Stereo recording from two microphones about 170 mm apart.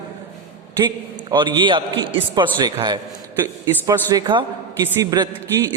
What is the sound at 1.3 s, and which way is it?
A woman's voice, 25° right (ahead or behind).